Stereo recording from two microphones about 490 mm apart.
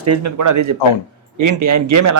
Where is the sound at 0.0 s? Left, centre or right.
Right.